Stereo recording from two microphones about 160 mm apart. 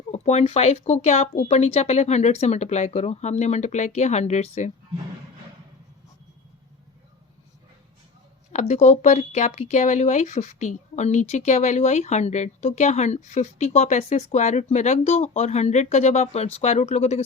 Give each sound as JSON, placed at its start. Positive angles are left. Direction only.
{"t": 0.1, "sound": "speech", "side_deg": 45}
{"t": 8.5, "sound": "speech", "side_deg": 45}